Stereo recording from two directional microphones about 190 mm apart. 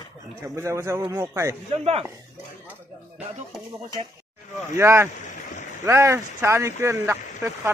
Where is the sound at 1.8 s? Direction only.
30° right (ahead or behind).